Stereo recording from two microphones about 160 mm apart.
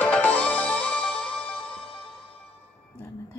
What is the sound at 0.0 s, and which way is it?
Music, 10° left (ahead or behind).